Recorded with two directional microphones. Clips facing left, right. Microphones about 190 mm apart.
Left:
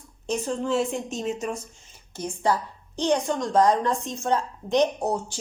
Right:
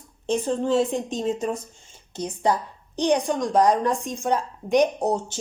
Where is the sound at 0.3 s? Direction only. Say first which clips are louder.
Right 3 dB; 30° right (ahead or behind).